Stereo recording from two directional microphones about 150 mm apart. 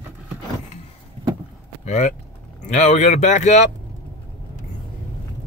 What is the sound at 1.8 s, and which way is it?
Speech, 50° left (ahead or behind).